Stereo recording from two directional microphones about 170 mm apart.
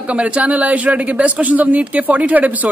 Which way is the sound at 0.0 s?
5° right (ahead or behind).